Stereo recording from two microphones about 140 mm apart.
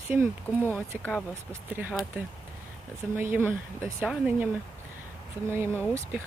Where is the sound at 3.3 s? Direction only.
15° right (ahead or behind).